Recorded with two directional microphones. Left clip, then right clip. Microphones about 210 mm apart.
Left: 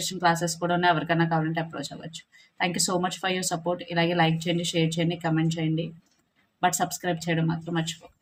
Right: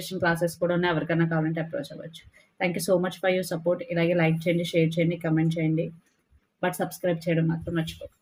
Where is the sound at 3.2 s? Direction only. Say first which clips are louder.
Right 3 dB; 20° left (ahead or behind).